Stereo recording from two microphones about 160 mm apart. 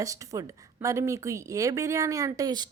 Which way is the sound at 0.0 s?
20° right (ahead or behind).